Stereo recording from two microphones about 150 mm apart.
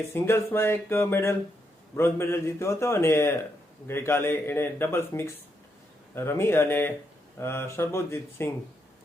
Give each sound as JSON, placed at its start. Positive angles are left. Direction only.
{"t": 0.0, "sound": "speech", "side_deg": 15}